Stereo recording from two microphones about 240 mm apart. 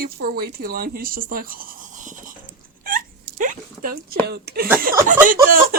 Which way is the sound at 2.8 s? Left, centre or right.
Right.